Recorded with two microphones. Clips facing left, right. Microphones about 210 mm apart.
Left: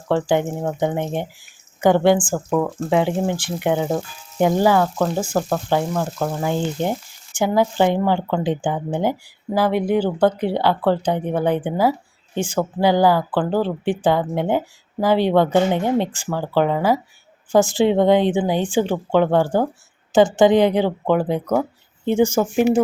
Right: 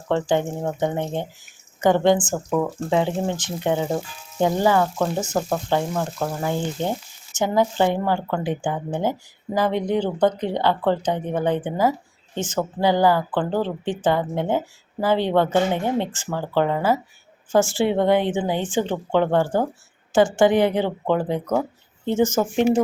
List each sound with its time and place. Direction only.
0.1 s speech: 10° left (ahead or behind)
2.3 s speech: centre (ahead or behind)
2.9 s speech: 15° left (ahead or behind)
6.4 s speech: 15° left (ahead or behind)